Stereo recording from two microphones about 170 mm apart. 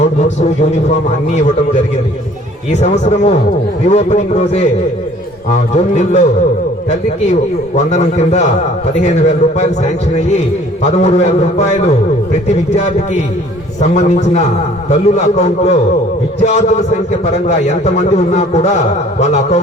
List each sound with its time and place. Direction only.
0.0 s speech: 40° left (ahead or behind)
2.7 s a man's voice: 40° left (ahead or behind)
7.8 s a man's voice: 40° left (ahead or behind)